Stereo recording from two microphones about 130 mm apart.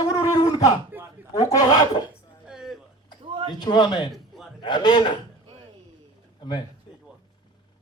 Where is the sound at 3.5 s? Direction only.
35° left (ahead or behind).